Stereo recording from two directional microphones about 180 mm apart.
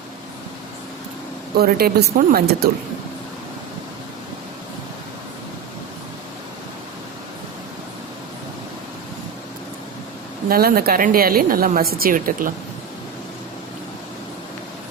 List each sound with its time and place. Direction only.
1.5 s a woman's voice: 60° right (ahead or behind)
10.5 s a woman's voice: 55° right (ahead or behind)